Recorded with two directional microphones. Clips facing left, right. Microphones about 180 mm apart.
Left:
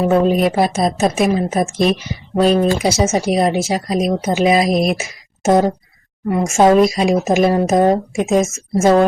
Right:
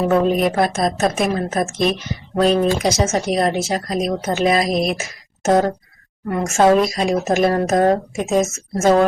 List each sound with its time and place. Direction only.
0.1 s speech: centre (ahead or behind)
7.4 s speech: 5° left (ahead or behind)